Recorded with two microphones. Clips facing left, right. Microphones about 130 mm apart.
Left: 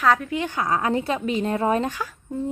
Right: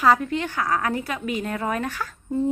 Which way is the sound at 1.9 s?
15° left (ahead or behind).